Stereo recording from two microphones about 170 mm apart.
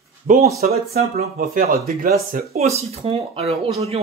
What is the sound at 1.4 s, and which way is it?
Speech, 55° right (ahead or behind).